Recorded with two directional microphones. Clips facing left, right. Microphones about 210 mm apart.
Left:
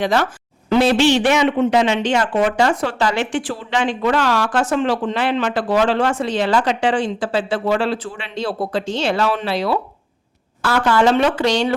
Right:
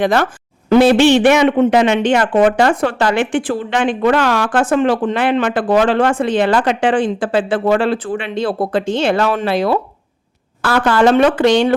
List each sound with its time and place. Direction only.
0.0 s a man's voice: 55° right (ahead or behind)